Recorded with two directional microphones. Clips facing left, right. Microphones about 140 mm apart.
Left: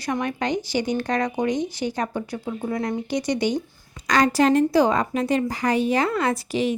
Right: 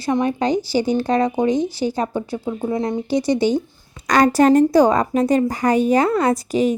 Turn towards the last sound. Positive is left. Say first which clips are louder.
# right 5 dB
turn(degrees=-40)  # may be behind; listen again after turning